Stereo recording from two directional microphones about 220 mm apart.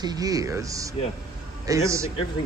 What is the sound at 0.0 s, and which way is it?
Speech, 15° right (ahead or behind).